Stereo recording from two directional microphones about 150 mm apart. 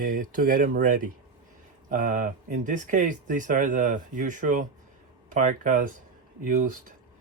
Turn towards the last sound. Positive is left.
turn(degrees=-60)  # may be behind; listen again after turning